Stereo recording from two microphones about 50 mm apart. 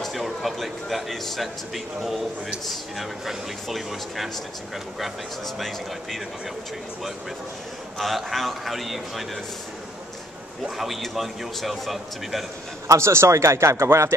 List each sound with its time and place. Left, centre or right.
0.0 s a man's voice: centre
8.0 s speech: centre
10.8 s speech: centre
12.8 s a man's voice: right